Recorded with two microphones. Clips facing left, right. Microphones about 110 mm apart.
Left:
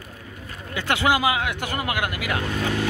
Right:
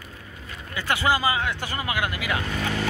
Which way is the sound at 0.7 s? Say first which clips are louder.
Left 2 dB; 75° left (ahead or behind).